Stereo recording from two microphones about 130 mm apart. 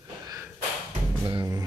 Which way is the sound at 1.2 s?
30° right (ahead or behind).